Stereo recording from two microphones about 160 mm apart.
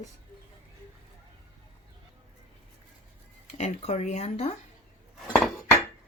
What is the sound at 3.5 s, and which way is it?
Speech, 45° left (ahead or behind).